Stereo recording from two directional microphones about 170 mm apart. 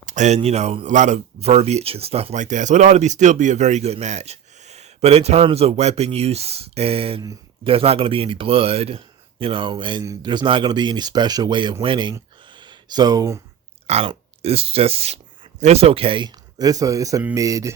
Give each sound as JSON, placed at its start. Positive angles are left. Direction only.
{"t": 0.0, "sound": "speech", "side_deg": -45}
{"t": 12.5, "sound": "a sound", "side_deg": -25}
{"t": 13.8, "sound": "speech", "side_deg": -35}